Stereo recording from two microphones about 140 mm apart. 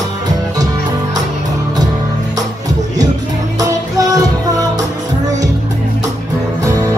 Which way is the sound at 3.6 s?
25° right (ahead or behind).